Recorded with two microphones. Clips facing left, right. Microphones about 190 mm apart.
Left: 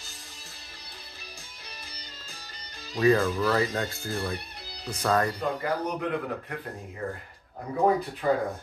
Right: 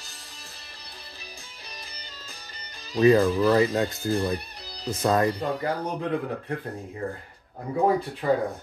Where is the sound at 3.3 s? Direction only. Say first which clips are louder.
Right 5 dB; 15° right (ahead or behind).